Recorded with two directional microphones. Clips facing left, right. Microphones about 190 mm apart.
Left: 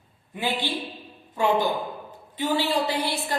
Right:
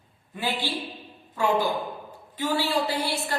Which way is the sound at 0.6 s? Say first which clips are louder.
Left 1 dB; 20° left (ahead or behind).